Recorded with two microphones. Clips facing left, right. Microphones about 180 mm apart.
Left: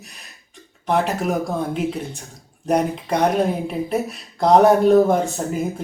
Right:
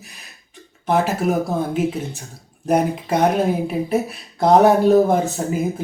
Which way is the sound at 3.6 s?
Centre (ahead or behind).